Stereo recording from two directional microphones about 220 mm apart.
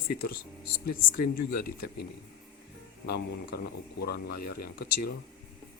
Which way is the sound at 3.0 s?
45° left (ahead or behind).